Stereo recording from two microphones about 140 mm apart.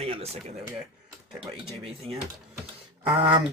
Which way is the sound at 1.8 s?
45° right (ahead or behind).